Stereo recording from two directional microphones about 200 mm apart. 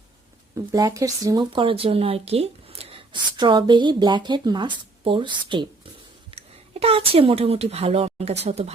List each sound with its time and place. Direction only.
0.5 s speech: 20° right (ahead or behind)